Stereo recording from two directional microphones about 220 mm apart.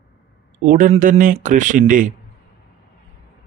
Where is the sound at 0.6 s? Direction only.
35° right (ahead or behind).